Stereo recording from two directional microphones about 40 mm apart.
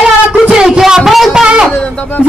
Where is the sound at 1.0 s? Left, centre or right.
Centre.